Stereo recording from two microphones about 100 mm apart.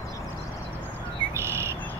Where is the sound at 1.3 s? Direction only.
25° right (ahead or behind).